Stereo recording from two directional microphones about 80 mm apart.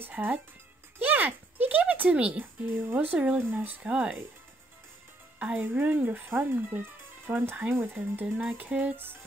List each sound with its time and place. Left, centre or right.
0.1 s speech: right
5.4 s speech: centre